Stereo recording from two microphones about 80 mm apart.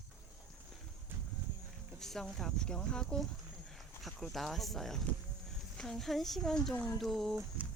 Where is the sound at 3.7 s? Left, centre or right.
Centre.